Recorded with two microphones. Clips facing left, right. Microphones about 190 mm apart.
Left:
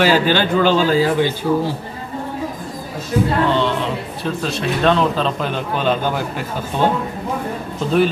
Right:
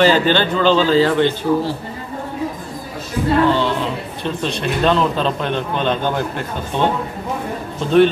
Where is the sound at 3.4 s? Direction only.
Centre (ahead or behind).